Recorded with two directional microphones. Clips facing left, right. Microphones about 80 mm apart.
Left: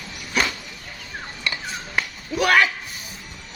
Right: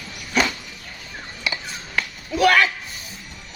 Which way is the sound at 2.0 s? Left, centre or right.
Centre.